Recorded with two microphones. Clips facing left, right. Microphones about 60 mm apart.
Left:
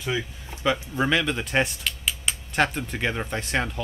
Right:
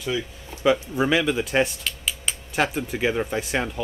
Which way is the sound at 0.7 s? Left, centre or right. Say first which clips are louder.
Right 3 dB; centre.